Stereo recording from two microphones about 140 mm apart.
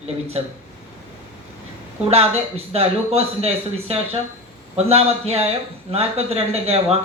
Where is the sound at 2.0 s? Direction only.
50° right (ahead or behind).